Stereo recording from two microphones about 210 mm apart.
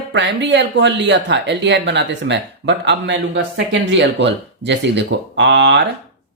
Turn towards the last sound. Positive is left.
turn(degrees=-55)  # may be behind; listen again after turning